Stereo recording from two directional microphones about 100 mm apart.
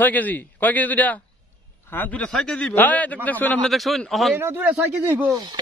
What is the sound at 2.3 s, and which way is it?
A man's voice, 5° left (ahead or behind).